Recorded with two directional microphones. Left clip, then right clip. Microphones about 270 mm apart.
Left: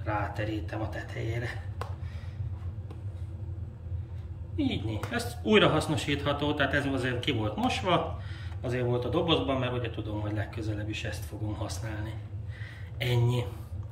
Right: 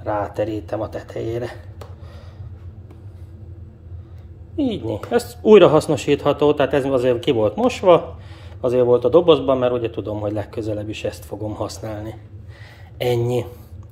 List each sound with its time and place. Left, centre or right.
0.0 s a man's voice: centre
4.6 s speech: centre
9.0 s a man's voice: centre